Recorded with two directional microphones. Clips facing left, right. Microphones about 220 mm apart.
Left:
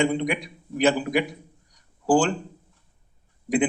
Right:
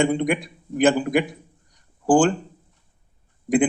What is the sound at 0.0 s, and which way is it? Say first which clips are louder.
A man's voice: right 3 dB; 50° right (ahead or behind).